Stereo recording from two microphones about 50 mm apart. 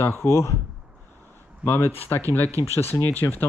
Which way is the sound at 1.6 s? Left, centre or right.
Left.